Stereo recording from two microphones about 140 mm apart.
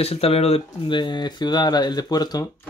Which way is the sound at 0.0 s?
45° left (ahead or behind).